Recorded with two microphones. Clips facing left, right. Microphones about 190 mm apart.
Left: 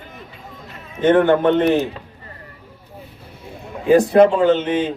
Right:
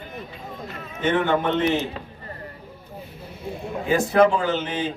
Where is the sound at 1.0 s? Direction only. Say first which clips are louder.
Left 8 dB; 55° left (ahead or behind).